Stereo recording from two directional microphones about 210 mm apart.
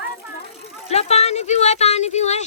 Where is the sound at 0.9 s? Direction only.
30° left (ahead or behind).